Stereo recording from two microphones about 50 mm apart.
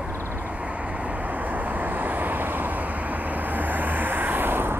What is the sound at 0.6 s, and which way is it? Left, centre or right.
Vehicle, right.